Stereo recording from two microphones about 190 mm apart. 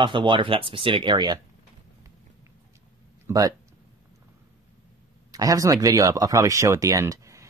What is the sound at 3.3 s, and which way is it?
Speech, 20° right (ahead or behind).